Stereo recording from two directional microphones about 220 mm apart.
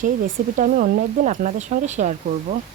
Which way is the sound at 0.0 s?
35° right (ahead or behind).